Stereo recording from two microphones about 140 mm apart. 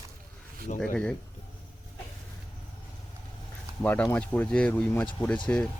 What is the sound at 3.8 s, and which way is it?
Speech, 10° left (ahead or behind).